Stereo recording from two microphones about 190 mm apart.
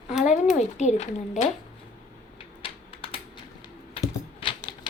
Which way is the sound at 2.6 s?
30° left (ahead or behind).